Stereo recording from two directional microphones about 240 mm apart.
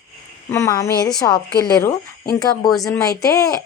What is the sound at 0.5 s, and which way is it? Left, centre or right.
A woman's voice, centre.